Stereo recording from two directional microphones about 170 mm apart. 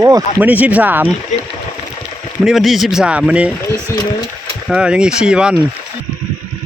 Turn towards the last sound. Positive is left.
turn(degrees=-5)  # may be behind; listen again after turning